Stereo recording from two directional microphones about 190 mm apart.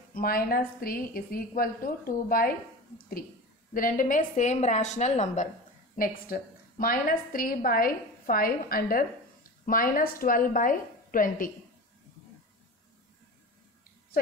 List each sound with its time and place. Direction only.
0.1 s a woman's voice: 50° left (ahead or behind)